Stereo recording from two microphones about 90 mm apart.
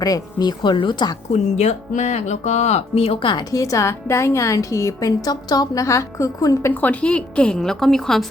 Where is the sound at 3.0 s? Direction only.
90° left.